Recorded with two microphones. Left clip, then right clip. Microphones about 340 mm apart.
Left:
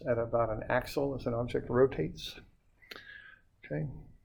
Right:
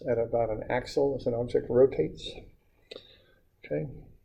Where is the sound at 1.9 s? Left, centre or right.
Left.